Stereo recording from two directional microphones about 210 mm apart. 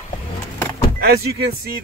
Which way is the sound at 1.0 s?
50° right (ahead or behind).